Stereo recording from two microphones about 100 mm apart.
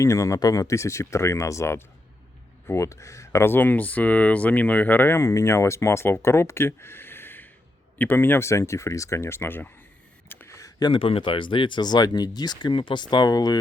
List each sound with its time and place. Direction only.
0.0 s speech: 30° left (ahead or behind)
10.2 s a sound: 25° left (ahead or behind); by 11.0 s 45° left (ahead or behind)
11.0 s speech: 65° left (ahead or behind); by 13.6 s 40° left (ahead or behind)